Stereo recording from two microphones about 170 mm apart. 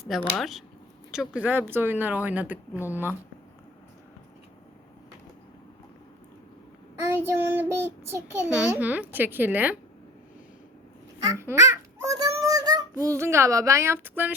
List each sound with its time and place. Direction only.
0.0 s speech: centre (ahead or behind)
7.1 s speech: 15° right (ahead or behind)
11.2 s a child's voice: 20° right (ahead or behind)